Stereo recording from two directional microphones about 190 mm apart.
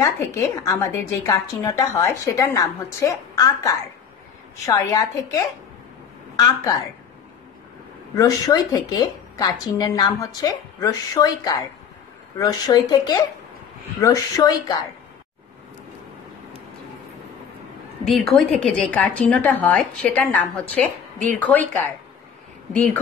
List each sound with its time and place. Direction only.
0.0 s a woman's voice: 15° left (ahead or behind)
8.2 s a woman's voice: 20° left (ahead or behind)
18.0 s a woman's voice: centre (ahead or behind)